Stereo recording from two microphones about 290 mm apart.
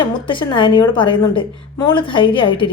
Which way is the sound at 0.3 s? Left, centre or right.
Centre.